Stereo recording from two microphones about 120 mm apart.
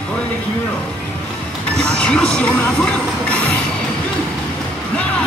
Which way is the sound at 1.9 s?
5° left (ahead or behind).